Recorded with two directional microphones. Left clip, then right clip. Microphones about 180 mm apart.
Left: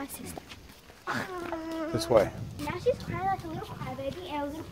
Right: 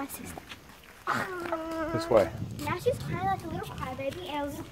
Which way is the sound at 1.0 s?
20° right (ahead or behind).